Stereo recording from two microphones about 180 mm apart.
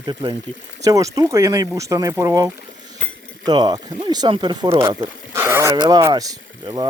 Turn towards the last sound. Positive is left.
turn(degrees=-20)  # may be behind; listen again after turning